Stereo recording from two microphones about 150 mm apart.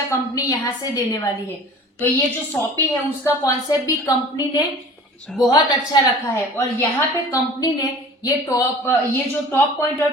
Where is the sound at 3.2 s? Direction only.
20° left (ahead or behind).